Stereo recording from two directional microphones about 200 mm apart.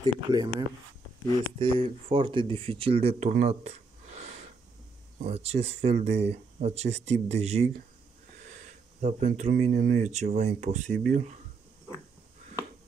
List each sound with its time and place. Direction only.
0.0 s speech: 20° right (ahead or behind)
9.0 s speech: 35° right (ahead or behind)